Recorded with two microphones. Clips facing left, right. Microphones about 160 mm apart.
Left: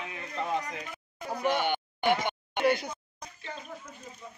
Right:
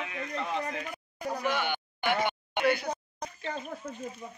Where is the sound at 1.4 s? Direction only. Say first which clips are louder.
Left 5 dB; 40° left (ahead or behind).